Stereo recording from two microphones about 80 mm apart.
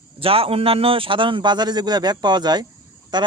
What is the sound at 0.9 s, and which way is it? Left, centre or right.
Speech, right.